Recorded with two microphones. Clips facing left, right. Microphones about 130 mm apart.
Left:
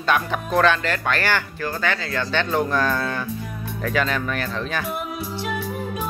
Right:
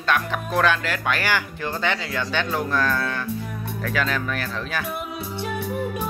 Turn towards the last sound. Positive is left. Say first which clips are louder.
# left 2 dB
turn(degrees=0)  # may be behind; listen again after turning